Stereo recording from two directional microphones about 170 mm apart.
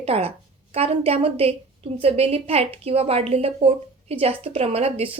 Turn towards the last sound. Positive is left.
turn(degrees=-35)  # may be behind; listen again after turning